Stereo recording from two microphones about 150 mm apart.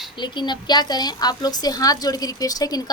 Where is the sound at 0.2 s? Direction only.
30° left (ahead or behind).